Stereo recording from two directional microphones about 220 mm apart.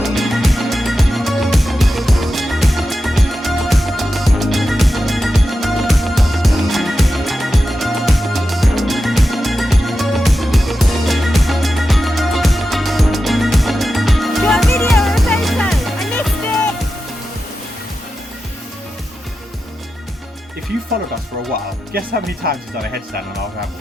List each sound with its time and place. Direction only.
0.0 s music: centre (ahead or behind)
22.4 s speech: 45° right (ahead or behind)